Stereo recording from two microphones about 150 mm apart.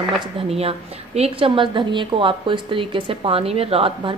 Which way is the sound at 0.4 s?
40° right (ahead or behind).